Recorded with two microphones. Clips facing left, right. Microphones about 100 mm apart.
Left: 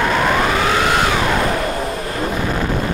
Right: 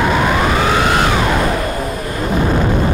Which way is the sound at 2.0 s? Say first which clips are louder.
Right 1 dB; 30° left (ahead or behind).